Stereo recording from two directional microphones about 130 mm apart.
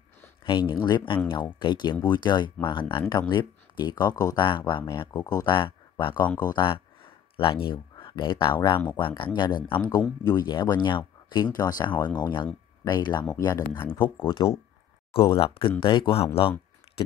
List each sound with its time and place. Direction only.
0.5 s speech: 35° left (ahead or behind)
13.6 s speech: 20° left (ahead or behind)
14.2 s speech: 40° left (ahead or behind)